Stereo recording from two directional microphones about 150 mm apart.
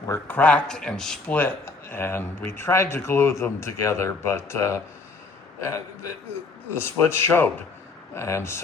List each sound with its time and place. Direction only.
0.1 s a man's voice: 10° left (ahead or behind)
6.8 s speech: 15° left (ahead or behind)